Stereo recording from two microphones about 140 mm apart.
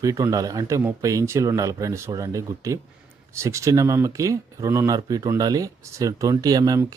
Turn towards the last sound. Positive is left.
turn(degrees=-25)  # may be behind; listen again after turning